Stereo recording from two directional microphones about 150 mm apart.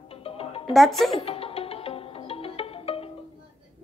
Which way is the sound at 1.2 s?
40° left (ahead or behind).